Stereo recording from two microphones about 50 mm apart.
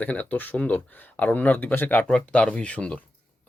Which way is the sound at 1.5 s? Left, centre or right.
Left.